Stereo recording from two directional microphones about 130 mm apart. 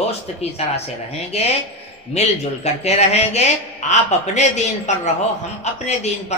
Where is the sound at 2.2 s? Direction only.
55° left (ahead or behind).